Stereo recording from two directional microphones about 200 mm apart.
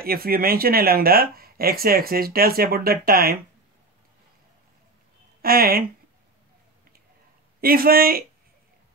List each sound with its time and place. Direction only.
0.0 s speech: 50° right (ahead or behind)
5.4 s speech: 50° right (ahead or behind)
7.6 s speech: 50° right (ahead or behind)